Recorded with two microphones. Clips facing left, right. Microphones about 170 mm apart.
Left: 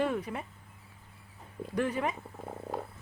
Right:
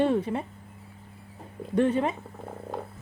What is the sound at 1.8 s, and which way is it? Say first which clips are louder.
Speech: right 7 dB; 25° right (ahead or behind).